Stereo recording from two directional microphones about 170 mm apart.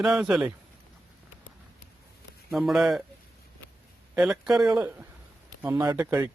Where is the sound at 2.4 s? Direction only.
Centre (ahead or behind).